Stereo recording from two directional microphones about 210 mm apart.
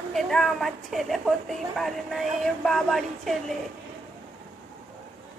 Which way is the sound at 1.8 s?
Centre (ahead or behind).